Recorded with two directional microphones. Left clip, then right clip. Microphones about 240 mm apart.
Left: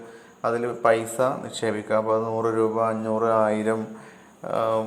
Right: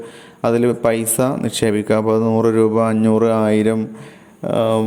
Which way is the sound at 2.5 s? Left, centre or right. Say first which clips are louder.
Right 5 dB; right.